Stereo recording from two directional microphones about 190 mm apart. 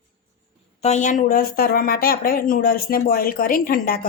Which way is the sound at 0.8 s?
40° left (ahead or behind).